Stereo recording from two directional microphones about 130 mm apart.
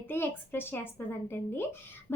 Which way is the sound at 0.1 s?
15° left (ahead or behind).